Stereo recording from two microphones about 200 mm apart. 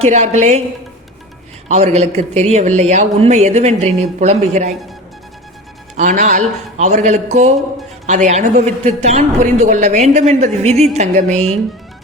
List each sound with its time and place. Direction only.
0.0 s speech: 35° right (ahead or behind)
1.6 s speech: 35° right (ahead or behind)
6.0 s speech: 40° right (ahead or behind)